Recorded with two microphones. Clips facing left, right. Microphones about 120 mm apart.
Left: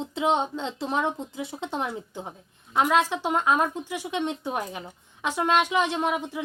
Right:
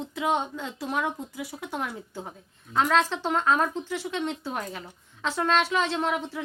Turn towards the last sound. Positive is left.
turn(degrees=15)  # may be behind; listen again after turning